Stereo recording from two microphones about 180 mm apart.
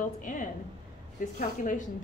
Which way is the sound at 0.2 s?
45° left (ahead or behind).